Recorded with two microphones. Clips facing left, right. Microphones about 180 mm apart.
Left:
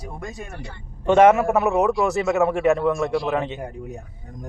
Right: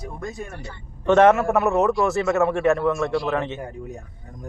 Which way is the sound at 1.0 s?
10° left (ahead or behind).